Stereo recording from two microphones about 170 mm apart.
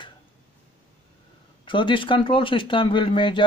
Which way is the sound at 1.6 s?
30° left (ahead or behind).